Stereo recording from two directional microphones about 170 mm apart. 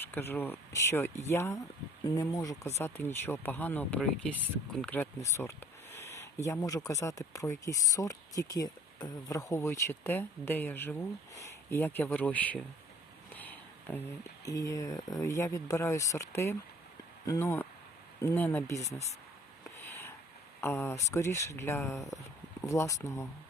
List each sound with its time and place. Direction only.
0.0 s speech: 10° left (ahead or behind)
13.3 s a sound: 10° left (ahead or behind)
14.4 s speech: 20° left (ahead or behind)
18.8 s speech: 40° left (ahead or behind)
19.9 s a sound: 15° left (ahead or behind)
20.6 s speech: 15° left (ahead or behind)